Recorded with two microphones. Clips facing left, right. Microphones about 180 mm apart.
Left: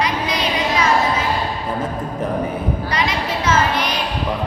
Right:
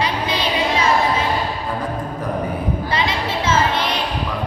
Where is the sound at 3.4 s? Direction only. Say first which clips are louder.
Even; 25° right (ahead or behind).